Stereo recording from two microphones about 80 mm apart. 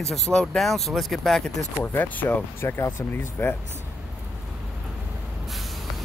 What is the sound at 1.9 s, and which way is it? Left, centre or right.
Speech, left.